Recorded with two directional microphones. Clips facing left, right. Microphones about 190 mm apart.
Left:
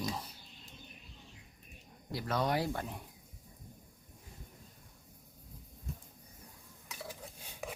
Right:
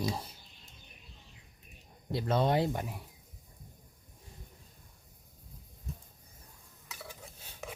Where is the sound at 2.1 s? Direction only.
25° right (ahead or behind).